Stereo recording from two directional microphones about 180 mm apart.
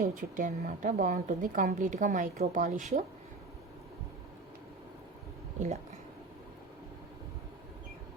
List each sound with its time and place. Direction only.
0.0 s a woman's voice: 50° right (ahead or behind)